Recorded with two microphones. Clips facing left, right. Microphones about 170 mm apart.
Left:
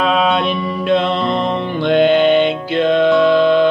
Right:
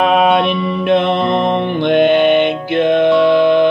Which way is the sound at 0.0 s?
50° right (ahead or behind).